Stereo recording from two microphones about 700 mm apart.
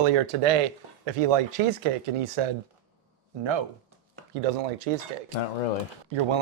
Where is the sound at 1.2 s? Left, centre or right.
Right.